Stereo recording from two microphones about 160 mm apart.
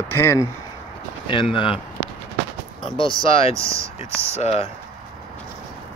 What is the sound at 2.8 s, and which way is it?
Speech, 30° left (ahead or behind).